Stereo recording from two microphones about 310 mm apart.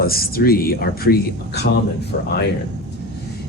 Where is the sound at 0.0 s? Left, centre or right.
Left.